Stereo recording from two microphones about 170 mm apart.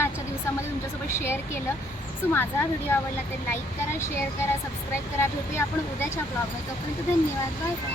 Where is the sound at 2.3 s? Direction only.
15° left (ahead or behind).